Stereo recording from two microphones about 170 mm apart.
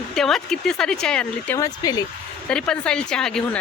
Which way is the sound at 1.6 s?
20° left (ahead or behind).